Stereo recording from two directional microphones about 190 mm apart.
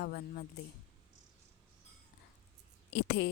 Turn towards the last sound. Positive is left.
turn(degrees=60)  # may be behind; listen again after turning